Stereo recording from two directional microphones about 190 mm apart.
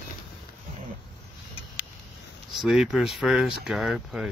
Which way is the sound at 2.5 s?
Centre (ahead or behind).